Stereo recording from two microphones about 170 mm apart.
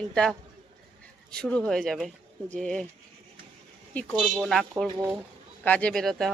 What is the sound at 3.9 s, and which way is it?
Speech, 10° left (ahead or behind).